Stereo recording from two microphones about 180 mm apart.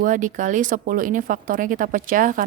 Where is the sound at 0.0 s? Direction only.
45° right (ahead or behind).